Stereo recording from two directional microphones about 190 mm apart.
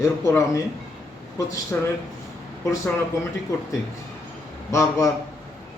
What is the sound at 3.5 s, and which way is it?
Speech, 20° left (ahead or behind).